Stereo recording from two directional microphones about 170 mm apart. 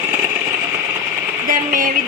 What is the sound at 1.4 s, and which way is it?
Speech, 55° right (ahead or behind).